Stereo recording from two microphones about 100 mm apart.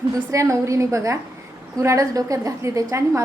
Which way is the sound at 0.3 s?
30° right (ahead or behind).